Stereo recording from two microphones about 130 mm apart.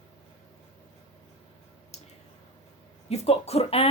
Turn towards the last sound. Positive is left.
turn(degrees=50)  # may be behind; listen again after turning